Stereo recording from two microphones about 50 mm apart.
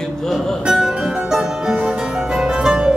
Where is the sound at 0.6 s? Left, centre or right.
Centre.